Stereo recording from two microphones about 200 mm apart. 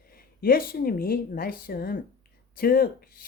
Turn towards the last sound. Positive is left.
turn(degrees=45)  # may be behind; listen again after turning